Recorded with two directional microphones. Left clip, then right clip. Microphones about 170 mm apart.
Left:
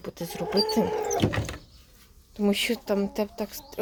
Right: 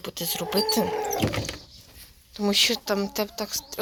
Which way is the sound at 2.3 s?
25° left (ahead or behind).